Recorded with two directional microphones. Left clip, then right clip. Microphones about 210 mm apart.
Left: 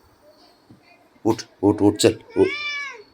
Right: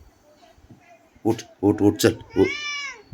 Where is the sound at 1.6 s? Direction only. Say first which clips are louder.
Left 2 dB; 15° right (ahead or behind).